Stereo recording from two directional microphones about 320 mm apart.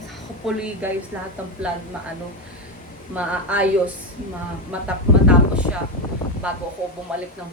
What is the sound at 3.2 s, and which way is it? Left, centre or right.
Speech, centre.